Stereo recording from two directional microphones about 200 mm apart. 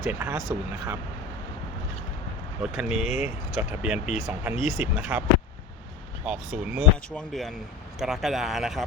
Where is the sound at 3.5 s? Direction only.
5° right (ahead or behind).